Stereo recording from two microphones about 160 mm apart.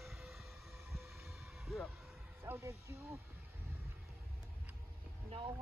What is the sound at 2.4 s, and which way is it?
Speech, 20° right (ahead or behind).